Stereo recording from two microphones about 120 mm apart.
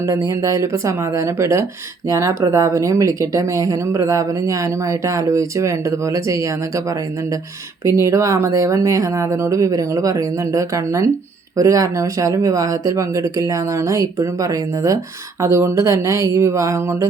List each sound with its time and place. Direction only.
0.0 s speech: 25° right (ahead or behind)
7.9 s speech: 25° right (ahead or behind)